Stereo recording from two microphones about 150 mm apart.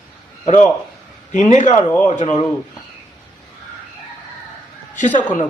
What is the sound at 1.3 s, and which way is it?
Speech, 55° left (ahead or behind).